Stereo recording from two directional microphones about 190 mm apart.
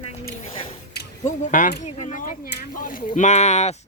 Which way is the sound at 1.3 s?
45° left (ahead or behind).